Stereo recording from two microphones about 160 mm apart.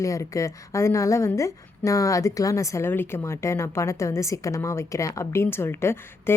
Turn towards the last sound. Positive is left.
turn(degrees=15)  # may be behind; listen again after turning